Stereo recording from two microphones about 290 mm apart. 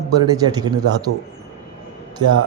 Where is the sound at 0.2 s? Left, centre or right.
Centre.